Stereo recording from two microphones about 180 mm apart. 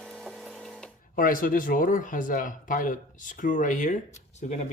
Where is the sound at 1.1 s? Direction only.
50° left (ahead or behind).